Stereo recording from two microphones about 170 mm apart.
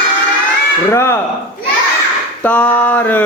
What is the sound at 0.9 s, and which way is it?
Speech, 15° left (ahead or behind).